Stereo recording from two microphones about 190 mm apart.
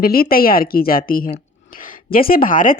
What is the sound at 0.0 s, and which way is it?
Speech, 50° left (ahead or behind).